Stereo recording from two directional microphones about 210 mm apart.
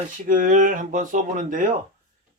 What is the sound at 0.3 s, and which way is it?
Speech, 40° right (ahead or behind).